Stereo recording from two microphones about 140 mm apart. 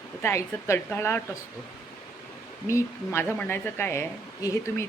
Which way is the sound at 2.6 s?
20° left (ahead or behind).